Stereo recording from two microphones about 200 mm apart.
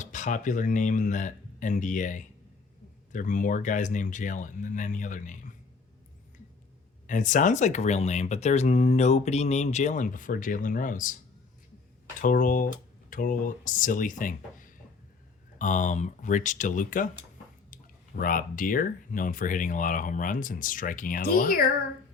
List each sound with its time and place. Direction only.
0.0 s speech: 40° left (ahead or behind)
7.1 s speech: 40° left (ahead or behind)
12.2 s speech: 45° left (ahead or behind)
18.2 s speech: 45° left (ahead or behind)